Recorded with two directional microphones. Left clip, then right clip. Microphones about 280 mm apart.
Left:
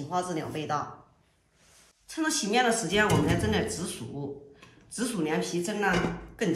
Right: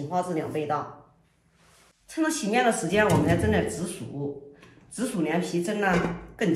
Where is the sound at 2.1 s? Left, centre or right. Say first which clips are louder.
Right 2 dB; centre.